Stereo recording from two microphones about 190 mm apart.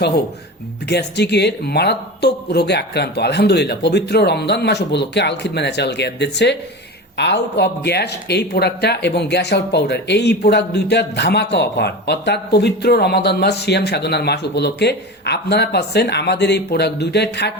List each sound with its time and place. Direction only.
0.9 s speech: 60° left (ahead or behind)